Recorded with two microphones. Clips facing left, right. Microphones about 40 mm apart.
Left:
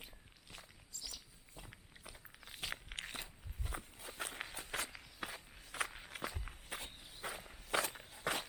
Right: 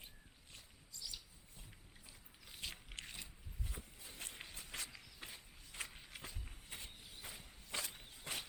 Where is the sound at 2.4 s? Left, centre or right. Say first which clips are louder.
Left 5 dB; left.